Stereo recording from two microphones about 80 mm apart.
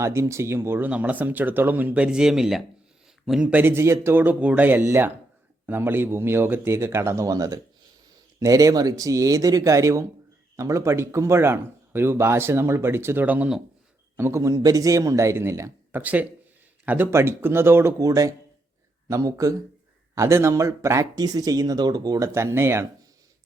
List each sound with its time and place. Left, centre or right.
0.0 s speech: right
0.9 s speech: centre
3.4 s speech: centre
3.7 s speech: right
13.2 s speech: centre
14.2 s speech: right
15.9 s speech: right
17.1 s speech: right
18.0 s speech: right
21.2 s speech: right
22.4 s speech: right